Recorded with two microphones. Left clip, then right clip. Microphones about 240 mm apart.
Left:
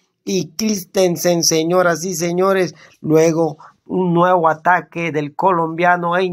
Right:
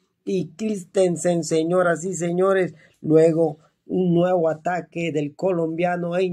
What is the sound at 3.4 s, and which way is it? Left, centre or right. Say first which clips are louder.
Speech: left 3 dB; left.